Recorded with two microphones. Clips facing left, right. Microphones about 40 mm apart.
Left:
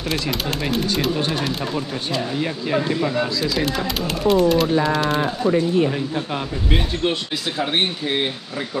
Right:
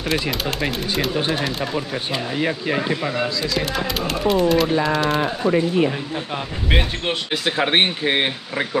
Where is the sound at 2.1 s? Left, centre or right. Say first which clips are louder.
Right 1 dB; right.